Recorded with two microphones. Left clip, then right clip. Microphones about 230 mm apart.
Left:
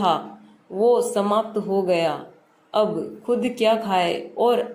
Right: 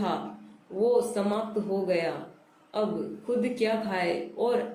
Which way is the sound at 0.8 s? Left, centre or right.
Left.